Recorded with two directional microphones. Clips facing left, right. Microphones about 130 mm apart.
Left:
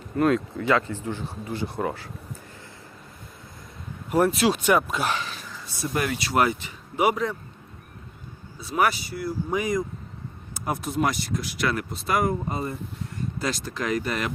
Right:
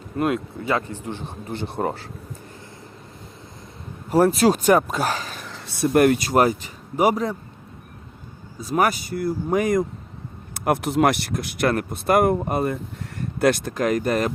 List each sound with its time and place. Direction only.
0.2 s a man's voice: 15° right (ahead or behind); by 2.0 s 30° right (ahead or behind)
4.1 s speech: 35° right (ahead or behind)
5.4 s speech: 70° right (ahead or behind); by 7.3 s 35° right (ahead or behind)
8.6 s speech: 45° right (ahead or behind)
10.5 s speech: 65° right (ahead or behind); by 14.3 s 40° right (ahead or behind)